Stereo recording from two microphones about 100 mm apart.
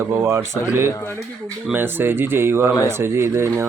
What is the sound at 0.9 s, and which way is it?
Speech, 25° left (ahead or behind).